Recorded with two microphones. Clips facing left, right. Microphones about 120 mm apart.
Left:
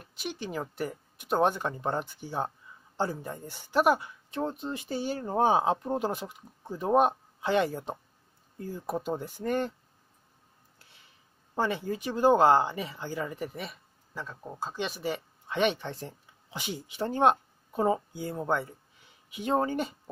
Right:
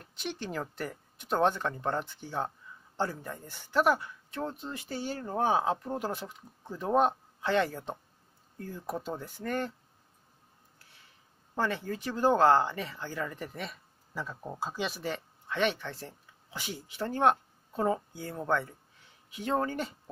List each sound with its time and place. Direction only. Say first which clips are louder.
0.0 s speech: left 1 dB; 5° left (ahead or behind)
11.5 s speech: left 2 dB; 15° left (ahead or behind)
15.1 s speech: left 2 dB; 20° left (ahead or behind)